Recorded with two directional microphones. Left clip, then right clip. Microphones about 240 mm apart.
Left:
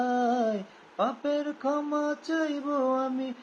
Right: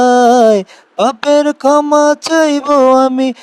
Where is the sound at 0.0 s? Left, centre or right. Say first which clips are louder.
Right 19 dB; right.